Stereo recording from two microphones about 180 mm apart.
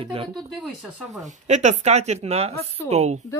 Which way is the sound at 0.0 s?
30° right (ahead or behind).